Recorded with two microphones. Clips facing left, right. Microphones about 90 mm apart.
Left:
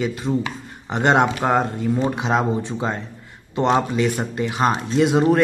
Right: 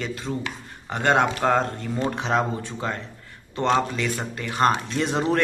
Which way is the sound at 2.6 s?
20° left (ahead or behind).